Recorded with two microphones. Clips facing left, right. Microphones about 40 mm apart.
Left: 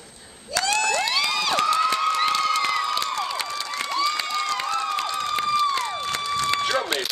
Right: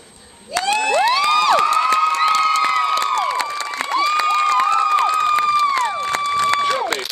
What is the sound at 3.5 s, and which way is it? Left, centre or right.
Crowd, right.